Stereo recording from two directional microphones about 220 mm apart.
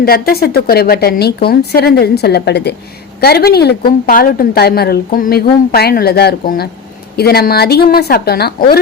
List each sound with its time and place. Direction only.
0.0 s a woman's voice: 45° left (ahead or behind)